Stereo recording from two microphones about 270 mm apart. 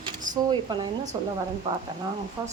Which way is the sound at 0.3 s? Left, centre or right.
Centre.